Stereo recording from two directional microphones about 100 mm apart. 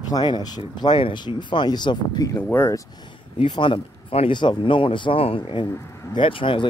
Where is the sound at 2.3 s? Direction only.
25° left (ahead or behind).